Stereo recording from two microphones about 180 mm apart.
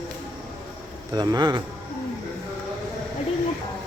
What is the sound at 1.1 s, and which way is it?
Speech, 20° right (ahead or behind).